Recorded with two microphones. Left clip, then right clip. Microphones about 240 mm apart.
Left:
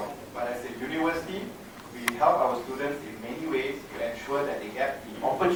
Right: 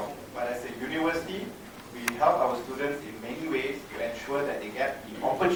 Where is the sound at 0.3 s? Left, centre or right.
Centre.